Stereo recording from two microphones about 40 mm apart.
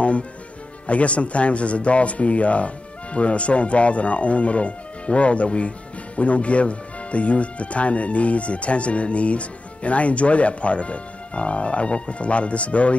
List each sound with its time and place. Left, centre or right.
0.8 s speech: left